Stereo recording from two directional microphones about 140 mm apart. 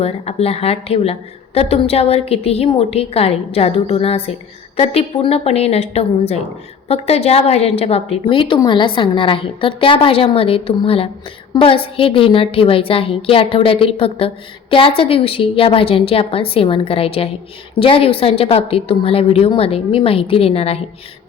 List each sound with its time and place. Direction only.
0.0 s a woman's voice: 45° left (ahead or behind)